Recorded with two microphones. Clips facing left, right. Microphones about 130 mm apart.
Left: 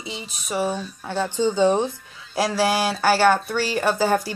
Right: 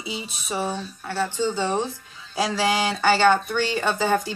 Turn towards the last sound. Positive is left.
turn(degrees=5)  # may be behind; listen again after turning